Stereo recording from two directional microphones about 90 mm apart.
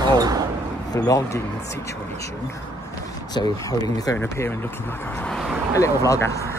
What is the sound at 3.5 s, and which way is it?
Speech, 40° left (ahead or behind).